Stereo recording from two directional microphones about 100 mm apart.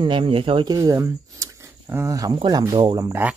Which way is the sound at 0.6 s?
40° right (ahead or behind).